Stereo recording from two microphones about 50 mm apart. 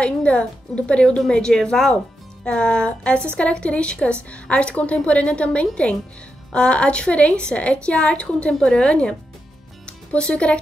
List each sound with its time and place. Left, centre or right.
0.0 s a woman's voice: left